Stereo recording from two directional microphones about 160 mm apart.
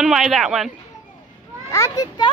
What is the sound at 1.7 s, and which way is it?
Speech, 20° left (ahead or behind).